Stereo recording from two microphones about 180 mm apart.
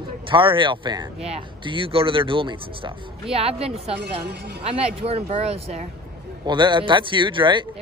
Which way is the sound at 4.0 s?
70° right (ahead or behind).